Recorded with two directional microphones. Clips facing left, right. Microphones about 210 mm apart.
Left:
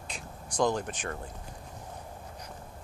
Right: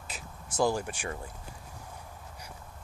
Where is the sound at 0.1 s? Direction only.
10° right (ahead or behind).